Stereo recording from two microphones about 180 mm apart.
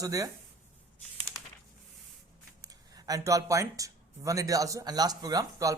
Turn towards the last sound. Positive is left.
turn(degrees=-20)  # may be behind; listen again after turning